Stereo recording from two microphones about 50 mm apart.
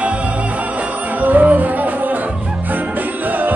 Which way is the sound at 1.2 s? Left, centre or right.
Right.